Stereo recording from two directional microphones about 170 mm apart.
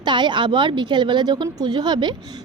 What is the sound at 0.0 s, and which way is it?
A woman's voice, 25° right (ahead or behind).